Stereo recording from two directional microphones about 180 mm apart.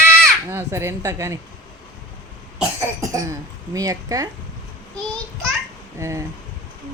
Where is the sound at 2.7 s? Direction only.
15° right (ahead or behind).